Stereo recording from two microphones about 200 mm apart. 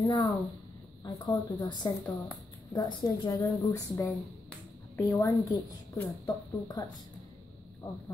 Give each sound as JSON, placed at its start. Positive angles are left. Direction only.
{"t": 0.0, "sound": "a woman's voice", "side_deg": 20}
{"t": 7.8, "sound": "a woman's voice", "side_deg": 15}